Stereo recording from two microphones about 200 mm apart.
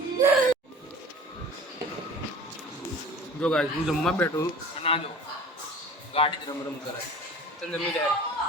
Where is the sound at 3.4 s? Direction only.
5° left (ahead or behind).